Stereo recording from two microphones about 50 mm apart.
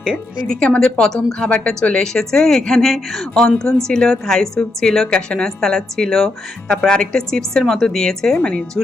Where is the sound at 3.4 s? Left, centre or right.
Centre.